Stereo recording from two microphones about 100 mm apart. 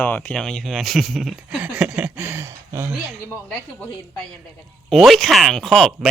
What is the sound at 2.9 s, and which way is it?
Speech, 10° right (ahead or behind).